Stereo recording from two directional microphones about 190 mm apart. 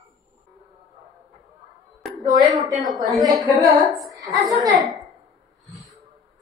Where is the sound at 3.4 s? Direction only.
20° right (ahead or behind).